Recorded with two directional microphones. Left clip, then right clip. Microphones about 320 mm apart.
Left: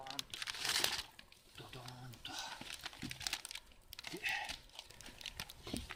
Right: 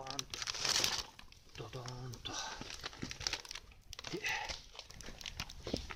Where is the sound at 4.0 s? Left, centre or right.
Left.